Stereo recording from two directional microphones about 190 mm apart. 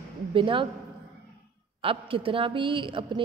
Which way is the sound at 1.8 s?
30° right (ahead or behind).